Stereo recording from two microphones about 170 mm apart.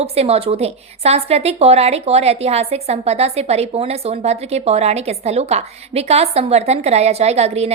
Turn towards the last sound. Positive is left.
turn(degrees=-40)  # may be behind; listen again after turning